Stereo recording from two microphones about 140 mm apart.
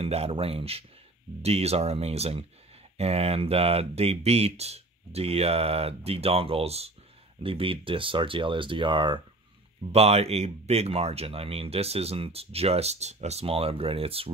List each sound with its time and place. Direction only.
0.0 s speech: 45° right (ahead or behind)
9.9 s speech: 45° right (ahead or behind)